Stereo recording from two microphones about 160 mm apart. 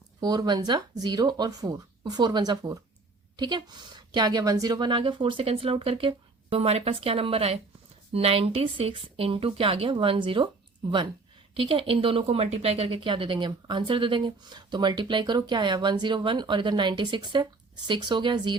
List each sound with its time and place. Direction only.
0.2 s a woman's voice: 25° right (ahead or behind)
11.5 s speech: 35° right (ahead or behind)